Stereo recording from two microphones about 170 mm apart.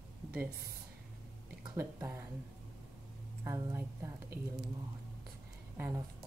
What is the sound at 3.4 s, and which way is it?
A woman's voice, 15° right (ahead or behind).